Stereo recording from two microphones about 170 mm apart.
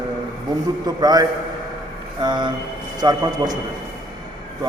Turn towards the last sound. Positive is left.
turn(degrees=-25)  # may be behind; listen again after turning